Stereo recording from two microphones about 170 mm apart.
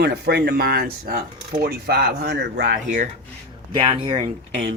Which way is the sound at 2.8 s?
45° right (ahead or behind).